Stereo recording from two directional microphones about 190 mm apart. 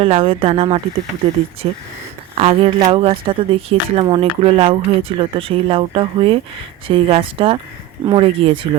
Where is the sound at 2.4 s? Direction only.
30° right (ahead or behind).